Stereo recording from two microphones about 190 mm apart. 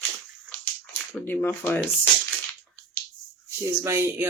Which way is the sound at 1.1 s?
10° left (ahead or behind).